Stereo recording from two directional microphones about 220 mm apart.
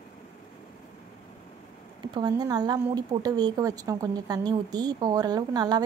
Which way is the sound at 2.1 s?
20° right (ahead or behind).